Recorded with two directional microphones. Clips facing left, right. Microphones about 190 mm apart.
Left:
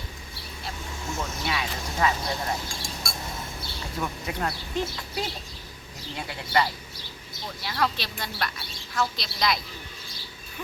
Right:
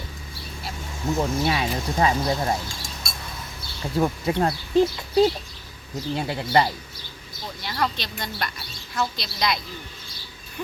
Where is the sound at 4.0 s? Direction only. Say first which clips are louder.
Right 9 dB; 35° right (ahead or behind).